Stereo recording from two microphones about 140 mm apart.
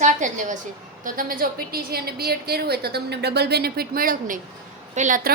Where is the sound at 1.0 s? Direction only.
85° right.